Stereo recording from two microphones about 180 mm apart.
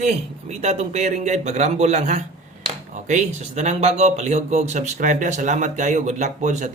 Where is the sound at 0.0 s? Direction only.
40° right (ahead or behind).